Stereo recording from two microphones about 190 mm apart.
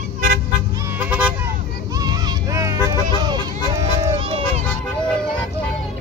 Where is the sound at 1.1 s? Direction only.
10° right (ahead or behind).